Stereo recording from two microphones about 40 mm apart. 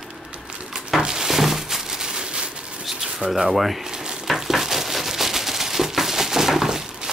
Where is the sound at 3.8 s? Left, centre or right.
Centre.